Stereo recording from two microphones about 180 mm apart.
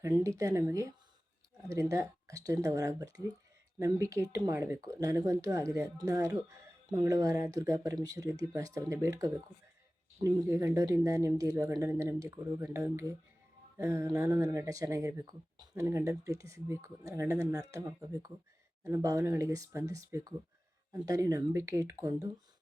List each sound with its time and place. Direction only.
0.0 s speech: 20° right (ahead or behind)